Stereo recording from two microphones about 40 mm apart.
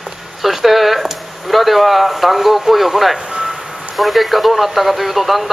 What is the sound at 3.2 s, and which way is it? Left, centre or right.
Reversing beeps, centre.